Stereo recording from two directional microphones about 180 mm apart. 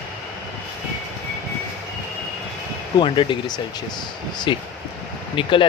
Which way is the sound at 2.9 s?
25° left (ahead or behind).